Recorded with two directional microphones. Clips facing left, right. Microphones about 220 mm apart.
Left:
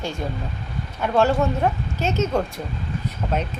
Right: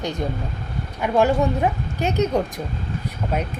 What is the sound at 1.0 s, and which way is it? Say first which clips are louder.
A woman's voice: right 1 dB; 15° right (ahead or behind).